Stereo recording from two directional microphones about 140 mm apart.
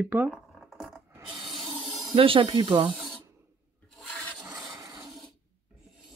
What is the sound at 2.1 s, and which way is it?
Speech, 40° right (ahead or behind).